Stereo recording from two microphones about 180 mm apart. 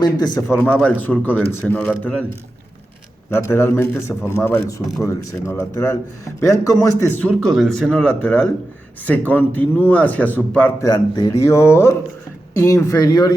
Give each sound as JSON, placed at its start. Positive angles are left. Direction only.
{"t": 0.0, "sound": "speech", "side_deg": 20}
{"t": 3.2, "sound": "speech", "side_deg": 15}
{"t": 10.8, "sound": "speech", "side_deg": 20}